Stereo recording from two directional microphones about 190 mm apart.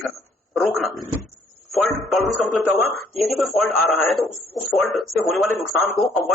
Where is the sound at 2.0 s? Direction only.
Centre (ahead or behind).